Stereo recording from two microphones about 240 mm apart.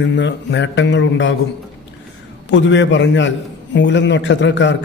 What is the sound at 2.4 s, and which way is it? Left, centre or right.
A man's voice, left.